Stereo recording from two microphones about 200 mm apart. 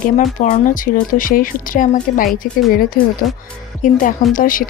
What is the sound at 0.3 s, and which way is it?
A woman's voice, 40° left (ahead or behind).